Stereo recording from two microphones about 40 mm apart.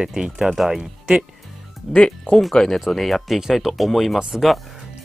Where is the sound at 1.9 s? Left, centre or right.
Left.